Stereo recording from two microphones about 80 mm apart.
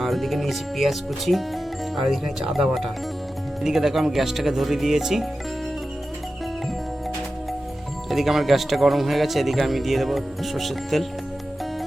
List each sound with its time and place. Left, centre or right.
0.0 s speech: centre
8.1 s speech: centre